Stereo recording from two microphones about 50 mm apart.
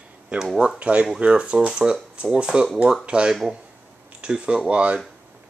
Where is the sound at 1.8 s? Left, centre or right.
Centre.